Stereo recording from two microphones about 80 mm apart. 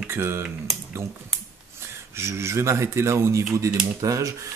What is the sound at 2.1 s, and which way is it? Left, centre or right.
Speech, right.